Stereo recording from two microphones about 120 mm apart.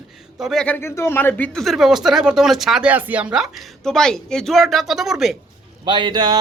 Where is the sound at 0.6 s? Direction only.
15° left (ahead or behind).